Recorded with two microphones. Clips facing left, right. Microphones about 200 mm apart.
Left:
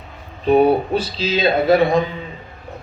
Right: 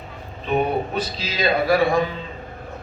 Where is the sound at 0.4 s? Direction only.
35° left (ahead or behind).